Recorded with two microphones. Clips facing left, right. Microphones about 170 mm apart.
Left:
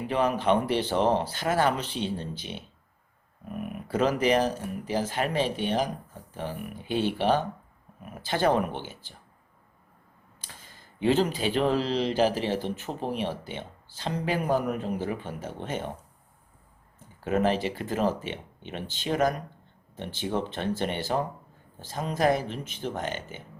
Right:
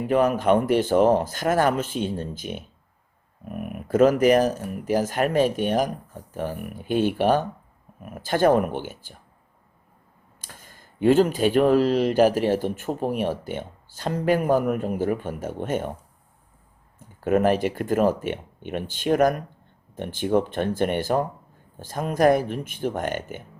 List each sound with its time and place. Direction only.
0.1 s speech: 50° right (ahead or behind)
10.4 s speech: 50° right (ahead or behind)
17.2 s speech: 50° right (ahead or behind)